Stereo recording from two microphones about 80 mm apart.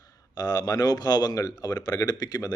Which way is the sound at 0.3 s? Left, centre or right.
Left.